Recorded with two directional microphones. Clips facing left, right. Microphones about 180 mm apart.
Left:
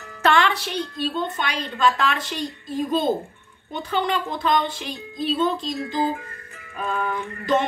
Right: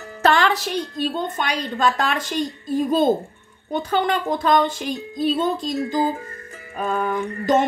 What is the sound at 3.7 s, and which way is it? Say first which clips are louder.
Speech: right 3 dB; 40° right (ahead or behind).